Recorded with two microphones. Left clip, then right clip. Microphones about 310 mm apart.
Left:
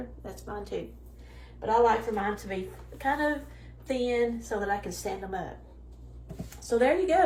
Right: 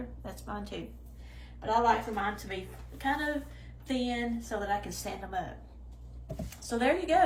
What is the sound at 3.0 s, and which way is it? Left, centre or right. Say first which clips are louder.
Speech: left 4 dB; centre.